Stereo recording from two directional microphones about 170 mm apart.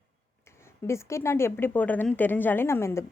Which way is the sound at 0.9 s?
15° left (ahead or behind).